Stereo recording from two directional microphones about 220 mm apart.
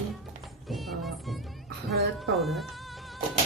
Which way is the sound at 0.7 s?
Centre (ahead or behind).